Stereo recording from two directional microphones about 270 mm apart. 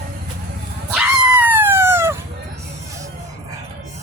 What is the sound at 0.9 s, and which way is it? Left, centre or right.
Dog, centre.